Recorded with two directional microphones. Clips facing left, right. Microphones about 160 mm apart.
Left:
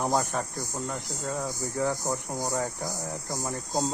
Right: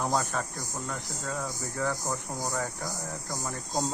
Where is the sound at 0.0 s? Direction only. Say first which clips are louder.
Left 2 dB; 20° left (ahead or behind).